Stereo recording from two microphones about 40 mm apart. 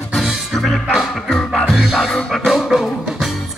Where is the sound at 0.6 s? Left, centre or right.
Centre.